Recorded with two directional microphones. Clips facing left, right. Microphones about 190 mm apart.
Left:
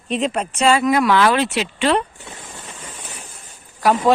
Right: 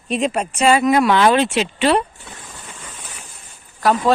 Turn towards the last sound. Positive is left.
turn(degrees=15)  # may be behind; listen again after turning